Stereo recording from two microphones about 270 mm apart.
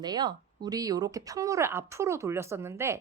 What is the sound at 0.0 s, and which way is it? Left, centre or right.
Speech, centre.